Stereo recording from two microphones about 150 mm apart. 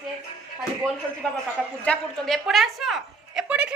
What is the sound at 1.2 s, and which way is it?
A woman's voice, 10° left (ahead or behind).